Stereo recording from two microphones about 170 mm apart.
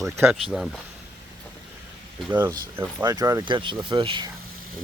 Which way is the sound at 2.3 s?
15° right (ahead or behind).